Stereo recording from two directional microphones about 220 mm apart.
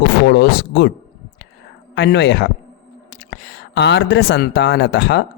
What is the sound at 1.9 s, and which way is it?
Speech, 50° left (ahead or behind).